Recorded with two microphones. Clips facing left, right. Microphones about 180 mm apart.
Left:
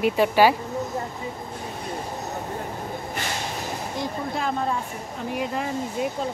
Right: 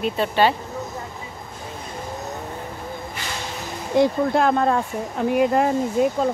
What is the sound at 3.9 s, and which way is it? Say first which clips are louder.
Speech: right 13 dB; 70° right (ahead or behind).